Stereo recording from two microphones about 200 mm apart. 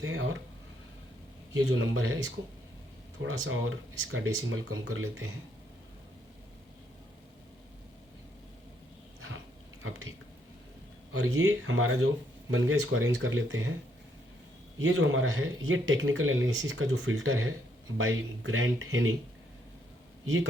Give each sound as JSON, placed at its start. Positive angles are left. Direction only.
{"t": 0.0, "sound": "speech", "side_deg": -90}
{"t": 1.5, "sound": "speech", "side_deg": -80}
{"t": 3.2, "sound": "speech", "side_deg": -90}
{"t": 11.1, "sound": "speech", "side_deg": -90}
{"t": 14.8, "sound": "speech", "side_deg": -75}
{"t": 20.2, "sound": "speech", "side_deg": -80}